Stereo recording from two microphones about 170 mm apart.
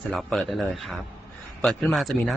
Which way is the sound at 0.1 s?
5° left (ahead or behind).